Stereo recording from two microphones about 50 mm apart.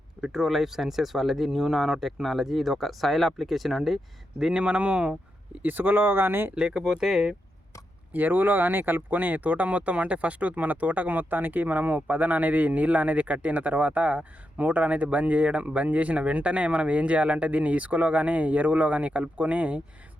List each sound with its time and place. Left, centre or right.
0.2 s speech: centre
4.5 s speech: right
5.6 s speech: right
6.6 s speech: centre
7.0 s speech: centre
8.1 s speech: right